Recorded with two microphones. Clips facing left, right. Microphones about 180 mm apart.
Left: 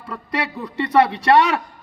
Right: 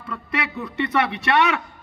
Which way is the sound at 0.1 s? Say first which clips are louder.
Left 2 dB; 30° left (ahead or behind).